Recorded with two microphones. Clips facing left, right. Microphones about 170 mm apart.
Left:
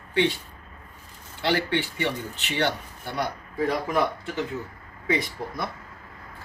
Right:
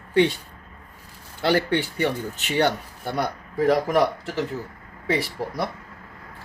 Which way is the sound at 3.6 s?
90° right.